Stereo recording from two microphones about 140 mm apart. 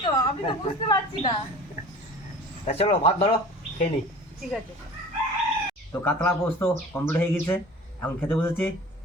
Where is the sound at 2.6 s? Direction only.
45° left (ahead or behind).